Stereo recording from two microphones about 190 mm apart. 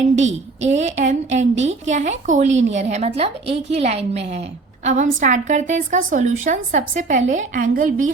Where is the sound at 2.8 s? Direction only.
35° right (ahead or behind).